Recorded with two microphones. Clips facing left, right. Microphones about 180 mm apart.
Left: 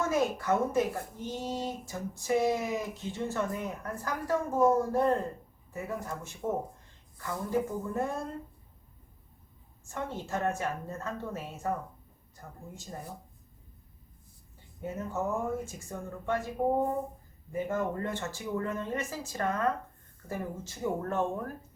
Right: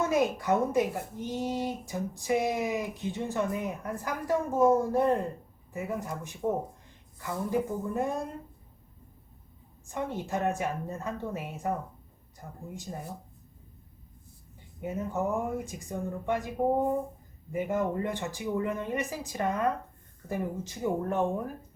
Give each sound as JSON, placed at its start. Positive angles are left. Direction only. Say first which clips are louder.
{"t": 0.0, "sound": "a woman's voice", "louder": "right 2 dB", "side_deg": -15}
{"t": 9.8, "sound": "a woman's voice", "louder": "right 3 dB", "side_deg": -15}
{"t": 14.8, "sound": "a woman's voice", "louder": "right 3 dB", "side_deg": -15}
{"t": 17.5, "sound": "a woman's voice", "louder": "right 2 dB", "side_deg": -15}